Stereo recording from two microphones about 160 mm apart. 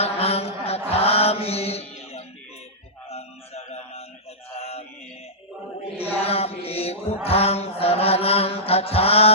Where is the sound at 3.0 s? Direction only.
40° left (ahead or behind).